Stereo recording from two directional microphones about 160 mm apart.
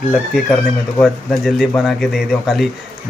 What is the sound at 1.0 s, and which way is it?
Speech, centre (ahead or behind).